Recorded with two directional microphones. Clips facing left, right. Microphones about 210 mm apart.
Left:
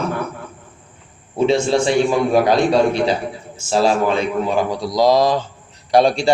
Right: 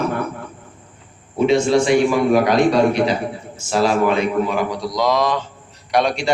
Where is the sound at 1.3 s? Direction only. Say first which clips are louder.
Right 1 dB; 30° left (ahead or behind).